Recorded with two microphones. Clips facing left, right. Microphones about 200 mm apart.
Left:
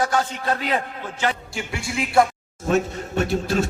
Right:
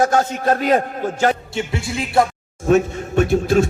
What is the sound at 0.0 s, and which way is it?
A man's voice, 45° right (ahead or behind).